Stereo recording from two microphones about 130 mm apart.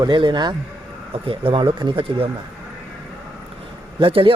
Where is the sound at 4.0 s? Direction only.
45° right (ahead or behind).